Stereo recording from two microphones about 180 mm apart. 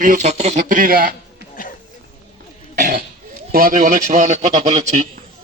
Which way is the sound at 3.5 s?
55° right (ahead or behind).